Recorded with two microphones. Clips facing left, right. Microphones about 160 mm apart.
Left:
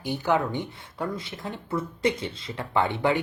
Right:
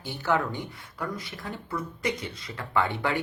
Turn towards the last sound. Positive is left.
turn(degrees=20)  # may be behind; listen again after turning